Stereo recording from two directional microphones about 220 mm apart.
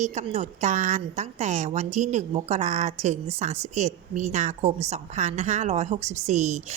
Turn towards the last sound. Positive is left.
turn(degrees=-30)  # may be behind; listen again after turning